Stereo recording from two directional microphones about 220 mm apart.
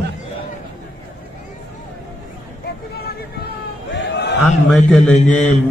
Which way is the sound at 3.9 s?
50° left (ahead or behind).